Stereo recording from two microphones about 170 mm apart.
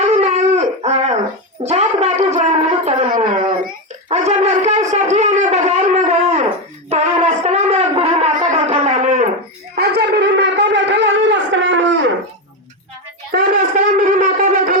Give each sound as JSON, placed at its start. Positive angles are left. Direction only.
{"t": 0.0, "sound": "dog", "side_deg": -40}
{"t": 1.6, "sound": "a sound", "side_deg": -40}
{"t": 4.1, "sound": "shofar", "side_deg": -40}
{"t": 9.7, "sound": "shofar", "side_deg": -70}
{"t": 11.6, "sound": "livestock", "side_deg": -90}
{"t": 13.3, "sound": "shofar", "side_deg": -50}